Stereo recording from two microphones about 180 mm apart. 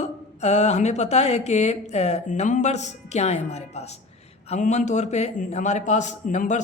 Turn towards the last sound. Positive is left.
turn(degrees=40)  # may be behind; listen again after turning